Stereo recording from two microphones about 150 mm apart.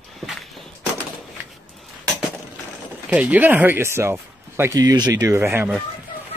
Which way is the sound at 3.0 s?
10° right (ahead or behind).